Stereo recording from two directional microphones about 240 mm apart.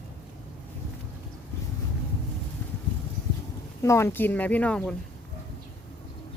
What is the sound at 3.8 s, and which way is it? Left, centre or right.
A woman's voice, centre.